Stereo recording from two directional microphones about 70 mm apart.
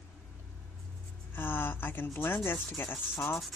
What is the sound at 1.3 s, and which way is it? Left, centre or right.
Speech, left.